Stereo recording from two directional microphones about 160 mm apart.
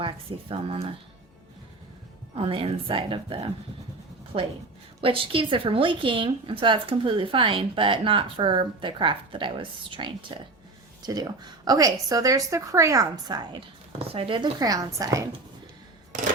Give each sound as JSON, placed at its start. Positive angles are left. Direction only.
{"t": 0.0, "sound": "speech", "side_deg": -35}
{"t": 2.3, "sound": "speech", "side_deg": -35}
{"t": 4.9, "sound": "speech", "side_deg": -35}
{"t": 14.1, "sound": "speech", "side_deg": -35}